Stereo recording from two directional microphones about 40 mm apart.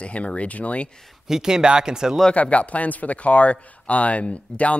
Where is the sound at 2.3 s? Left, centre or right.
Left.